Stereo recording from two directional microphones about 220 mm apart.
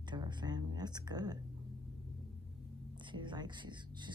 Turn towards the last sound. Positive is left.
turn(degrees=-20)  # may be behind; listen again after turning